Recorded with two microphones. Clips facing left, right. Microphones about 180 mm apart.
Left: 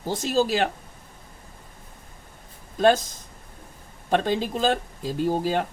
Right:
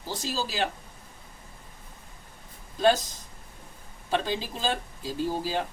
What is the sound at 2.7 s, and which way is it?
Speech, 50° left (ahead or behind).